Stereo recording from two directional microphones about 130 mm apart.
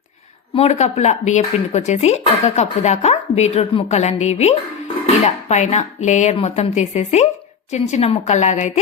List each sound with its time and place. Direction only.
0.5 s speech: 55° left (ahead or behind)